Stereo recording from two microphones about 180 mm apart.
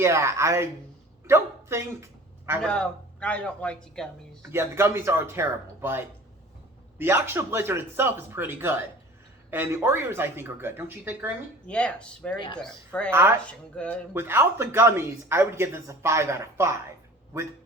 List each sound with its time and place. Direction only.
0.0 s speech: 15° right (ahead or behind)
2.6 s speech: 5° left (ahead or behind)
4.5 s speech: 15° right (ahead or behind)
7.0 s speech: 15° right (ahead or behind)
11.6 s speech: 5° left (ahead or behind)
13.1 s speech: 15° right (ahead or behind)
13.4 s speech: 5° left (ahead or behind)
14.1 s speech: 15° right (ahead or behind)